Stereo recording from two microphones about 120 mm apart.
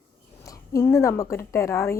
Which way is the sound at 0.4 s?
25° left (ahead or behind).